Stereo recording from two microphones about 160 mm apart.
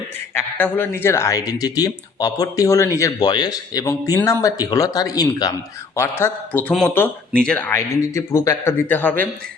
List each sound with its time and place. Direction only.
0.3 s speech: 10° left (ahead or behind)